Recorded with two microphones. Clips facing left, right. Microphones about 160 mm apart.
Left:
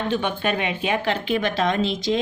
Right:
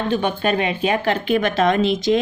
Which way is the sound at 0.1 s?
40° right (ahead or behind).